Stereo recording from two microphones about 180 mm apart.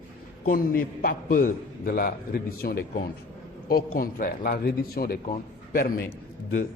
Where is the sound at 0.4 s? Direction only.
55° left (ahead or behind).